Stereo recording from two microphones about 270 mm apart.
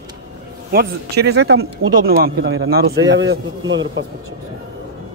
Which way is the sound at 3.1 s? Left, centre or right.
Right.